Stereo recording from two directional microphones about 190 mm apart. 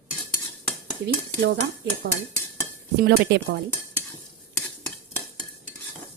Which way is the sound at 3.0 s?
60° right (ahead or behind).